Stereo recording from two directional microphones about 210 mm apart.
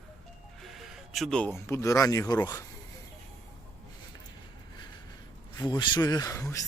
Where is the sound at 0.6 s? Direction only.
Centre (ahead or behind); by 2.6 s 20° left (ahead or behind).